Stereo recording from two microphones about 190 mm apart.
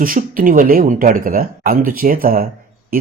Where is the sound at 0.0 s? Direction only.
45° right (ahead or behind).